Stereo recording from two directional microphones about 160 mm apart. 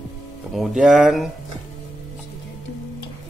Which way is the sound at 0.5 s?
Centre (ahead or behind).